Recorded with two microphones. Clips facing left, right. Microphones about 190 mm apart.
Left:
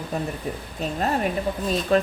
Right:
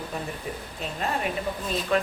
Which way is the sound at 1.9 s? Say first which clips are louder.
Left 4 dB; 35° left (ahead or behind).